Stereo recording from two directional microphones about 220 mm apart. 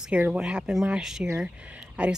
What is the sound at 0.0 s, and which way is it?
Speech, 5° right (ahead or behind).